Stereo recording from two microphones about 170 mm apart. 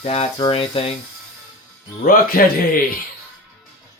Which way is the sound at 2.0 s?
60° left (ahead or behind).